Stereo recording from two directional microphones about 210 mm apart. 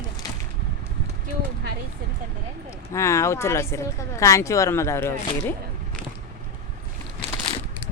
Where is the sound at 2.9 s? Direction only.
15° left (ahead or behind).